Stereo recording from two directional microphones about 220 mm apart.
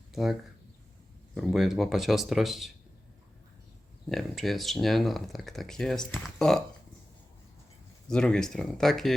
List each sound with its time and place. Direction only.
0.1 s speech: centre (ahead or behind)
1.4 s speech: centre (ahead or behind)
4.1 s speech: centre (ahead or behind)
8.0 s speech: 5° left (ahead or behind)